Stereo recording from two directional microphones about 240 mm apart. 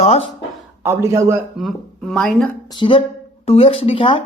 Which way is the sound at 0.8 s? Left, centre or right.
Centre.